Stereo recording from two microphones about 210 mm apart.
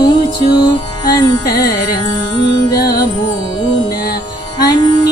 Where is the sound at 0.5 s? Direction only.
20° left (ahead or behind).